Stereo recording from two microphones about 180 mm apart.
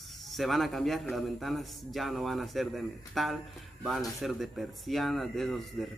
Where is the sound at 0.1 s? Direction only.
Centre (ahead or behind).